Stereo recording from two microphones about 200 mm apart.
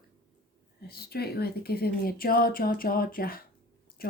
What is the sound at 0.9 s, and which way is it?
Speech, 50° left (ahead or behind).